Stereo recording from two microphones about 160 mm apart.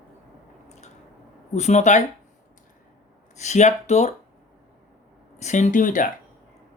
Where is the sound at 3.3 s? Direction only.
45° left (ahead or behind).